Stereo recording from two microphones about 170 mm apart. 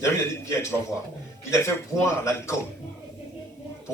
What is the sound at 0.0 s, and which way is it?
Speech, 15° left (ahead or behind).